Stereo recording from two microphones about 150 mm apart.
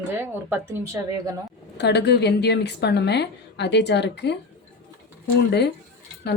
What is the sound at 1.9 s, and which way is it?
A woman's voice, 90° left.